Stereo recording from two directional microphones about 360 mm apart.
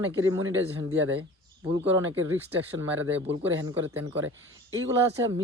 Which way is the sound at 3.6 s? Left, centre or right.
Centre.